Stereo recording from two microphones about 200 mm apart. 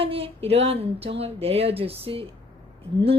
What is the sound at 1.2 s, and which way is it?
A woman's voice, 30° right (ahead or behind).